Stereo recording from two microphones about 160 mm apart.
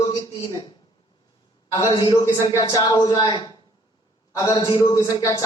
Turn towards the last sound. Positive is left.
turn(degrees=25)  # may be behind; listen again after turning